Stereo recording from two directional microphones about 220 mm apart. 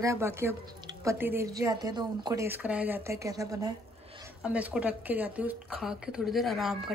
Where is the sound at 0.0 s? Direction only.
10° right (ahead or behind).